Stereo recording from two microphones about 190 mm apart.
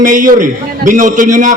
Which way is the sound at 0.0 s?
45° right (ahead or behind).